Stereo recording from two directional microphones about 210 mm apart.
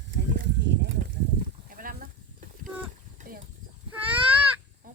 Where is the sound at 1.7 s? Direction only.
40° right (ahead or behind).